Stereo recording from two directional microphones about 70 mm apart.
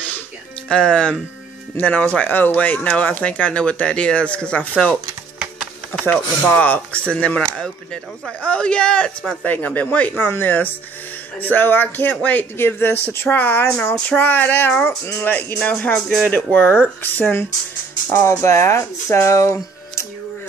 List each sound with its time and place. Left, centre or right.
0.7 s speech: centre
6.0 s speech: left
18.1 s speech: left